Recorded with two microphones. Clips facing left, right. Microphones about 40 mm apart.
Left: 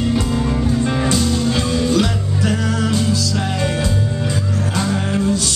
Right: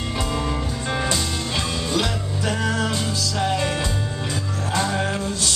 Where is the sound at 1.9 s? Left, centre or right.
Right.